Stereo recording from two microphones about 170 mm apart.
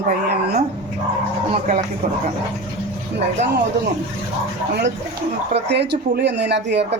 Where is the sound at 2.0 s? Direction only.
55° right (ahead or behind).